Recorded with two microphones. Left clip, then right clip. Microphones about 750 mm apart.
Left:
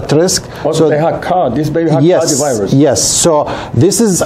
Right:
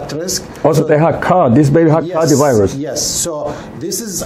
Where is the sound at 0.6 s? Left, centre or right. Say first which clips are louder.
Even; right.